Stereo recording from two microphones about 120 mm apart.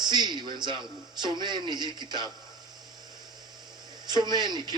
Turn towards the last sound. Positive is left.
turn(degrees=-35)  # may be behind; listen again after turning